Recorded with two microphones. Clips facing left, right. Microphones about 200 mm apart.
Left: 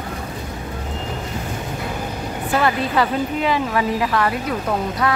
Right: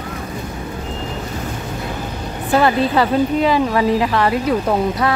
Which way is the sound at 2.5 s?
30° right (ahead or behind).